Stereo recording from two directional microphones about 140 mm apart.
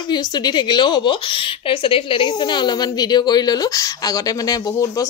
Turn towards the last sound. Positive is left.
turn(degrees=25)  # may be behind; listen again after turning